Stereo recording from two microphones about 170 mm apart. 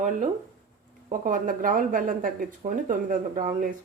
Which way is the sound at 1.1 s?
55° right (ahead or behind).